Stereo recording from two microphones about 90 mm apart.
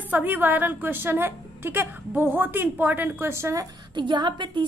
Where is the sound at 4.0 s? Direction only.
60° right (ahead or behind).